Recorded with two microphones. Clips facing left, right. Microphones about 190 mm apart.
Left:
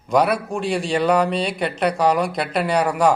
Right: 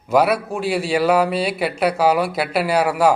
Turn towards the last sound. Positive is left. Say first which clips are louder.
# right 1 dB
turn(degrees=-5)  # may be behind; listen again after turning